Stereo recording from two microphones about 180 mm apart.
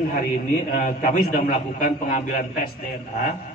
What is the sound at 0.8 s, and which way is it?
A man's voice, 45° left (ahead or behind).